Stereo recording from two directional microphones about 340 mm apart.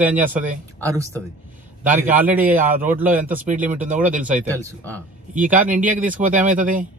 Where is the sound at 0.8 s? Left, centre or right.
Centre.